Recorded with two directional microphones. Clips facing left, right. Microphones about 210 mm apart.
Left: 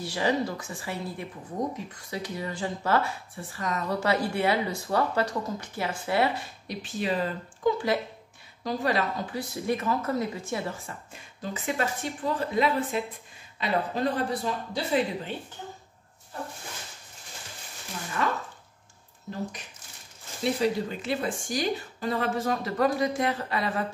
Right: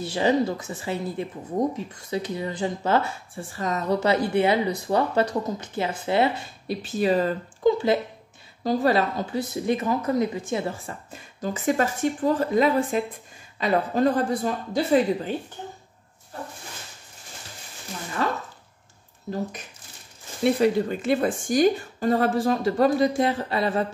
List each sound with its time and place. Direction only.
0.0 s speech: 25° right (ahead or behind)
6.8 s speech: 40° right (ahead or behind)
7.7 s speech: 25° right (ahead or behind)
8.6 s speech: 35° right (ahead or behind)
10.9 s a woman's voice: 40° right (ahead or behind)
18.2 s speech: 35° right (ahead or behind)
20.5 s a woman's voice: 55° right (ahead or behind)
22.4 s speech: 30° right (ahead or behind)